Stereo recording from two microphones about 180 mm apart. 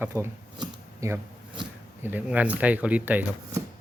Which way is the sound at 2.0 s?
10° right (ahead or behind).